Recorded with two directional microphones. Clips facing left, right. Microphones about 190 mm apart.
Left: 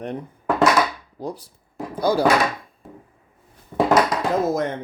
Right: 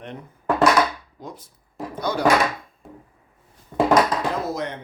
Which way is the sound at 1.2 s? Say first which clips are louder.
Left 9 dB; 35° left (ahead or behind).